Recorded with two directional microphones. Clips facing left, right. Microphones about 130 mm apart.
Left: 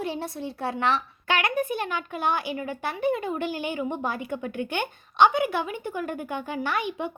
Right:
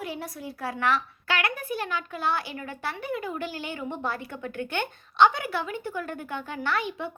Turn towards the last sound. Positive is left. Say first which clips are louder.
# left 1 dB
turn(degrees=15)  # may be behind; listen again after turning